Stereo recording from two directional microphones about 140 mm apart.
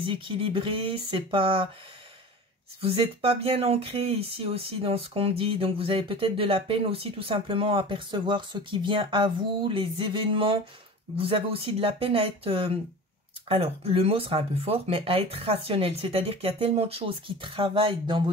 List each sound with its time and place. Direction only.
0.0 s speech: 35° right (ahead or behind)
2.8 s speech: 40° right (ahead or behind)